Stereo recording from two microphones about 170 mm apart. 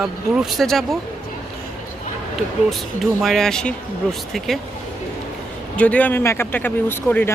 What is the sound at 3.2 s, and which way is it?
Speech, centre (ahead or behind).